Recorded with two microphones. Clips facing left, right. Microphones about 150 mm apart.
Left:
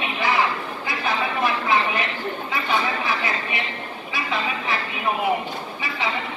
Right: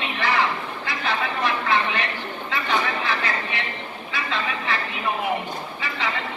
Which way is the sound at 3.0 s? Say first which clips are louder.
Left 1 dB; 15° left (ahead or behind).